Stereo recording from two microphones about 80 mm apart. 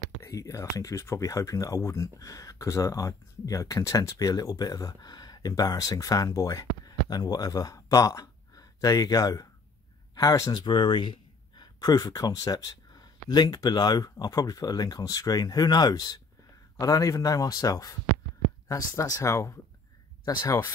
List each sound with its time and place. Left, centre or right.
0.2 s speech: left
10.7 s speech: left